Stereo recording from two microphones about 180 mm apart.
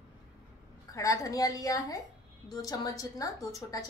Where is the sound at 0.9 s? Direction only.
20° left (ahead or behind).